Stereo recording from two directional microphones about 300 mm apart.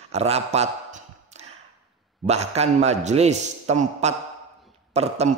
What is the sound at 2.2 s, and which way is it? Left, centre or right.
A man's voice, right.